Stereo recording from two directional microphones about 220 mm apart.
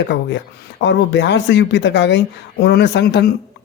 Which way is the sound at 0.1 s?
55° left (ahead or behind).